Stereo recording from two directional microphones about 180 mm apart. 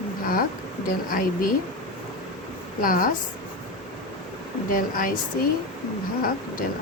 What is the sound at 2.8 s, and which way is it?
Speech, 50° left (ahead or behind).